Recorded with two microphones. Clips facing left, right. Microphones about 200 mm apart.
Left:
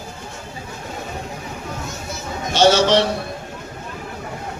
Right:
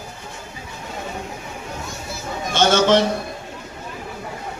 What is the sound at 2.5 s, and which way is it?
Speech, 50° right (ahead or behind).